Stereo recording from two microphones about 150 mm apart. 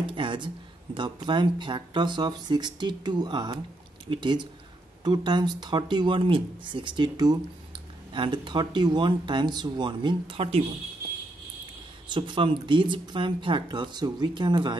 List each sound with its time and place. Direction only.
0.0 s a sound: 35° right (ahead or behind)
0.9 s speech: 30° right (ahead or behind)
12.1 s speech: 35° right (ahead or behind)